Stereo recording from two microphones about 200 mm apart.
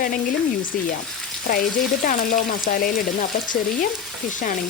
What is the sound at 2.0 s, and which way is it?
A woman's voice, 45° left (ahead or behind).